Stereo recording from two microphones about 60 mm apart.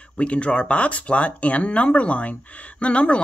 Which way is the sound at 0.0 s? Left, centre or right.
Centre.